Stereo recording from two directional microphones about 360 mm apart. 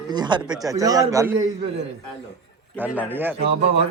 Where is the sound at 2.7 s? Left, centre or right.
Centre.